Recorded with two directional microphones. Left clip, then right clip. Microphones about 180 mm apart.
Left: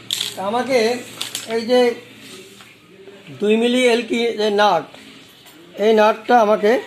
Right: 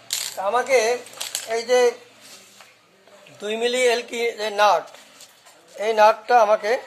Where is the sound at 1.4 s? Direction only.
10° left (ahead or behind).